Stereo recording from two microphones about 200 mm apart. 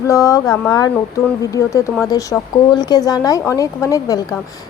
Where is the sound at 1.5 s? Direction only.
15° left (ahead or behind).